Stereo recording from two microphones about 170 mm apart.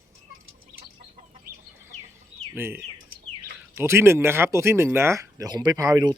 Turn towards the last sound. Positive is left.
turn(degrees=-20)  # may be behind; listen again after turning